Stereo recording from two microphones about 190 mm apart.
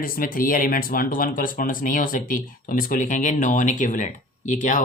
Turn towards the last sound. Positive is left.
turn(degrees=45)  # may be behind; listen again after turning